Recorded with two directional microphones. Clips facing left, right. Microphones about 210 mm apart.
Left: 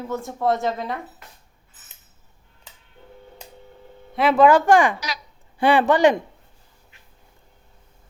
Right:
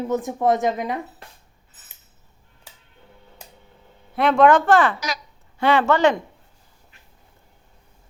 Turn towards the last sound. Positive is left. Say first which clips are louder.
# left 1 dB
turn(degrees=15)  # may be behind; listen again after turning